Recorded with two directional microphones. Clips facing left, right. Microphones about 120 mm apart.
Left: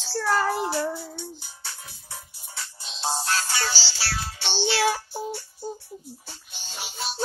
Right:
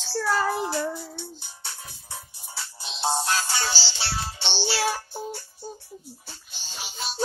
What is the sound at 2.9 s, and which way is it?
Music, 20° right (ahead or behind).